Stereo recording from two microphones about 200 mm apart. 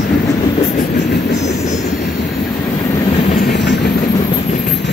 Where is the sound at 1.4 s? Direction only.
35° left (ahead or behind).